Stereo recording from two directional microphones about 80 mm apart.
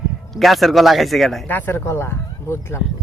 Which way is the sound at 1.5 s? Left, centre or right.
Left.